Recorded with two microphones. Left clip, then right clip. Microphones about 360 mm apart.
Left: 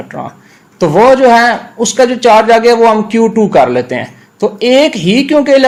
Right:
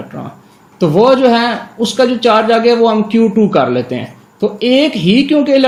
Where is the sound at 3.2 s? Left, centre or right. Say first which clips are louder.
Left 3 dB; left.